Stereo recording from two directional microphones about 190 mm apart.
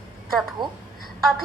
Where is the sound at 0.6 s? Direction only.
25° right (ahead or behind).